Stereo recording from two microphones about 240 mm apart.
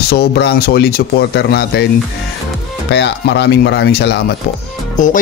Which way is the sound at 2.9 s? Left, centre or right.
Left.